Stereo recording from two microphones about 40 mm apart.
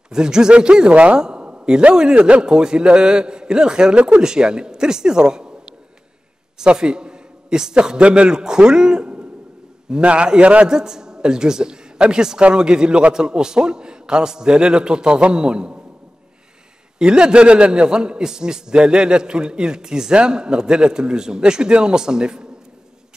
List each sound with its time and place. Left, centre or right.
0.1 s a man's voice: centre
1.2 s a sound: right
2.0 s a man's voice: right
10.7 s a man's voice: centre
17.0 s a man's voice: right